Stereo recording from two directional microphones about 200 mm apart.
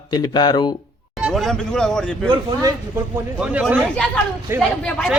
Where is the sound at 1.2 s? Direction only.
Centre (ahead or behind).